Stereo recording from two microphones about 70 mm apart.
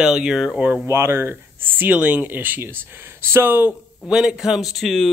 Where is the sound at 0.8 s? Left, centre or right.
Right.